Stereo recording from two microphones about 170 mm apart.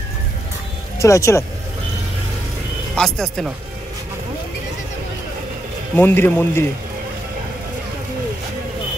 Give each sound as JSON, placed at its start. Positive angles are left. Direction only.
{"t": 0.9, "sound": "speech", "side_deg": 15}
{"t": 3.0, "sound": "speech", "side_deg": 5}
{"t": 5.9, "sound": "speech", "side_deg": 10}